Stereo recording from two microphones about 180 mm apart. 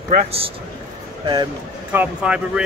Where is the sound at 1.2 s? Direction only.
25° right (ahead or behind).